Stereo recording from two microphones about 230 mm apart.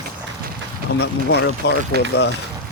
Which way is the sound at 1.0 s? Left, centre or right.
Left.